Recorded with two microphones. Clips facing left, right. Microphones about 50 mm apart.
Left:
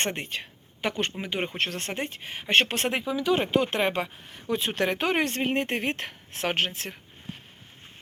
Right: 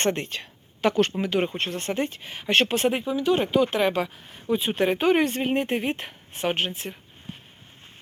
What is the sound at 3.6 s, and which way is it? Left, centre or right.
Speech, left.